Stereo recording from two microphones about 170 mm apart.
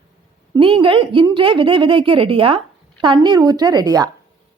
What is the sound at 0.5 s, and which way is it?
A woman's voice, 30° right (ahead or behind).